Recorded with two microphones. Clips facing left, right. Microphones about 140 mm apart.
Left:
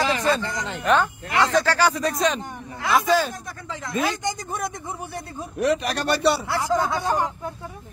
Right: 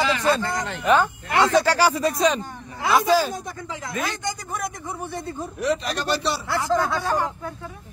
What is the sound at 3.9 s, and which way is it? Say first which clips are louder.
Speech: left 4 dB; 20° left (ahead or behind).